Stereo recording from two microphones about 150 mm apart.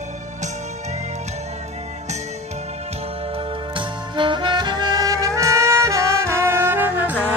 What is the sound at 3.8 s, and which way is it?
Music, 30° right (ahead or behind).